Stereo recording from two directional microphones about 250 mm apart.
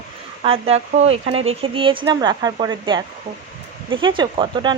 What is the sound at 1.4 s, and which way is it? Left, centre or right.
Speech, right.